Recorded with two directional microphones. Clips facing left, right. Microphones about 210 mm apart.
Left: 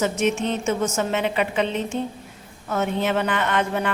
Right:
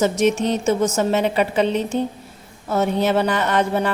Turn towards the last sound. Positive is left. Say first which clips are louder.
# right 4 dB
turn(degrees=-35)  # may be behind; listen again after turning